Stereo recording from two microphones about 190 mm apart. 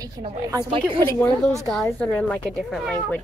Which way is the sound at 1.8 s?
10° left (ahead or behind).